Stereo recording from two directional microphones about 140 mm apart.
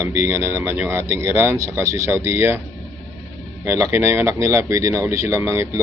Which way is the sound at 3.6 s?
20° right (ahead or behind).